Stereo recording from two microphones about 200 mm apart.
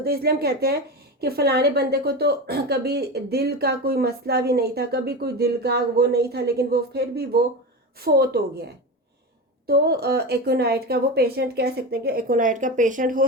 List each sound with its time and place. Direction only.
0.0 s a woman's voice: 50° right (ahead or behind)
9.6 s a woman's voice: 50° right (ahead or behind)